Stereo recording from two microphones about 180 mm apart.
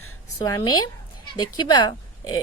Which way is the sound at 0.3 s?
20° left (ahead or behind).